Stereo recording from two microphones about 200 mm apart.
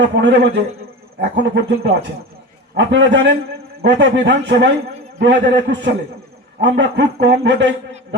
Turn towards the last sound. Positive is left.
turn(degrees=-60)  # may be behind; listen again after turning